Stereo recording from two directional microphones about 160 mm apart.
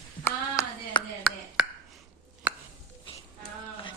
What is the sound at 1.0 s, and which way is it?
Chopping, 30° left (ahead or behind).